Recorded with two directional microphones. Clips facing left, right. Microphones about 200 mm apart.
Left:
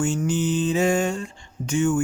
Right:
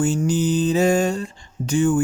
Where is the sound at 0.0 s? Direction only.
35° right (ahead or behind).